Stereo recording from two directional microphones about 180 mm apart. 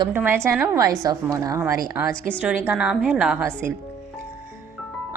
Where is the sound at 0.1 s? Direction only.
10° right (ahead or behind).